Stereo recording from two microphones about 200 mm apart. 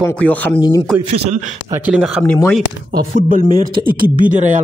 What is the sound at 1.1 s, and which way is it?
Speech, 35° right (ahead or behind).